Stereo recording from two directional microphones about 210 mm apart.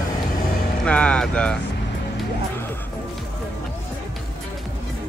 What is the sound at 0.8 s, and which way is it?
Speech, 5° left (ahead or behind).